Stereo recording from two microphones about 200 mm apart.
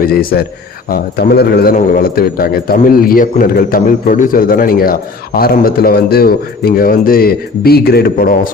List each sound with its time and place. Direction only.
0.0 s a man's voice: 50° left (ahead or behind)